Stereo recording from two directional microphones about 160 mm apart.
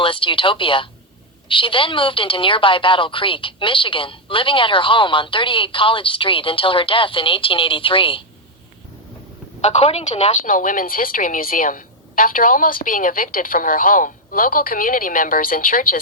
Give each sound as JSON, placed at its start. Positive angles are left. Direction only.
{"t": 0.0, "sound": "a woman's voice", "side_deg": 30}
{"t": 9.6, "sound": "a woman's voice", "side_deg": 45}
{"t": 10.5, "sound": "a woman's voice", "side_deg": 60}